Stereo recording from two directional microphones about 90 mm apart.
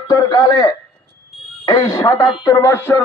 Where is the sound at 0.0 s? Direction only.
45° left (ahead or behind).